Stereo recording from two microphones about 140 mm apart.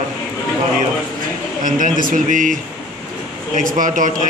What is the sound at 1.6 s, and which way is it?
A man's voice, 75° right (ahead or behind).